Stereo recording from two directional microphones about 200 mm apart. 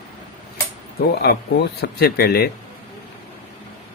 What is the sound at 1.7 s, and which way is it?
Speech, 50° left (ahead or behind).